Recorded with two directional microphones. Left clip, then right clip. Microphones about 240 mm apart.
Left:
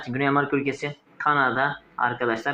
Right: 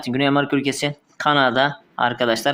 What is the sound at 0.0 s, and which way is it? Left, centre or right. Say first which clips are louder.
Speech: right 4 dB; right.